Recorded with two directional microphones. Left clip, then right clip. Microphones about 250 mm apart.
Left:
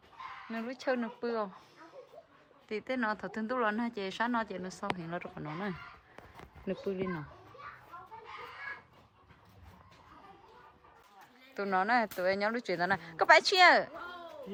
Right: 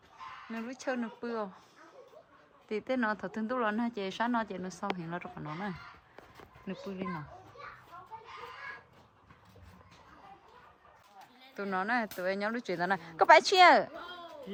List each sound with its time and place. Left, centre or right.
0.5 s speech: centre
2.6 s speech: centre
11.5 s speech: centre